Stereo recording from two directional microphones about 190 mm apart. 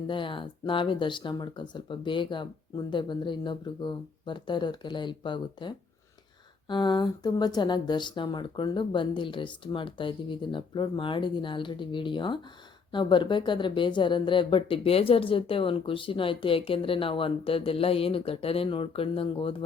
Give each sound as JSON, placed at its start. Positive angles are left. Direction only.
{"t": 0.1, "sound": "speech", "side_deg": 25}